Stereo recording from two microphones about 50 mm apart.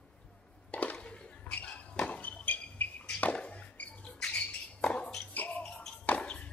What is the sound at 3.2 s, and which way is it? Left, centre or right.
Music, left.